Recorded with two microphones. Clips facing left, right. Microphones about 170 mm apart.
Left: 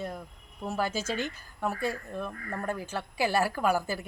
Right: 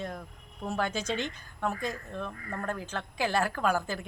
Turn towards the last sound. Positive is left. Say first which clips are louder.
# left 1 dB
turn(degrees=10)  # may be behind; listen again after turning